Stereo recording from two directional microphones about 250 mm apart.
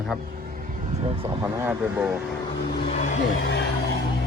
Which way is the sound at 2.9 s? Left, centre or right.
Left.